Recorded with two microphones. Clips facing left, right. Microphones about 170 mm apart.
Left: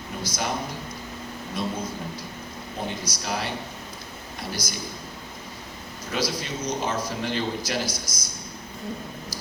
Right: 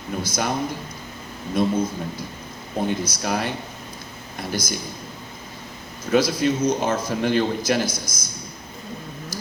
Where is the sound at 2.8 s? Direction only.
50° right (ahead or behind).